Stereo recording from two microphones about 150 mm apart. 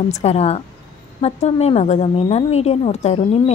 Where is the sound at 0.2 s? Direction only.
45° left (ahead or behind).